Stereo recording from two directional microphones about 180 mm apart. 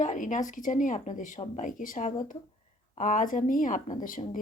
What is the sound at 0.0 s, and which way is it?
A woman's voice, 45° left (ahead or behind).